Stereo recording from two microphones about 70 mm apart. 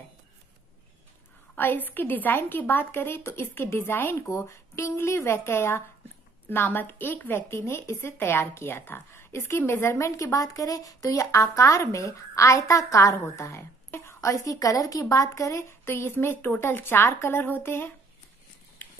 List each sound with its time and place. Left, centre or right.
1.6 s a woman's voice: left
4.5 s a woman's voice: left
13.8 s a sound: left
14.2 s a woman's voice: left
15.8 s a woman's voice: left